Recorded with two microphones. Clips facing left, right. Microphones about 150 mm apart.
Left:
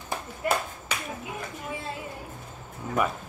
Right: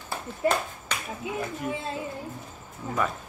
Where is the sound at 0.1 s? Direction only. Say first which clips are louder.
Right 2 dB; 5° left (ahead or behind).